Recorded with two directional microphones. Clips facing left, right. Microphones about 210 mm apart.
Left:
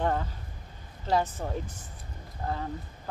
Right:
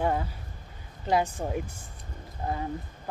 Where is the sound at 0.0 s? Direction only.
10° right (ahead or behind).